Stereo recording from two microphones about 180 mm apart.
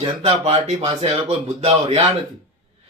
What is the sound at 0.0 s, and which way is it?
Speech, 35° right (ahead or behind).